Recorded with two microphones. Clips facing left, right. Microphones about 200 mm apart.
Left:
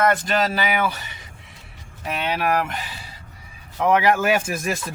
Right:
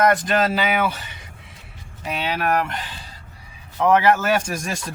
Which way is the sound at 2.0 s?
5° right (ahead or behind).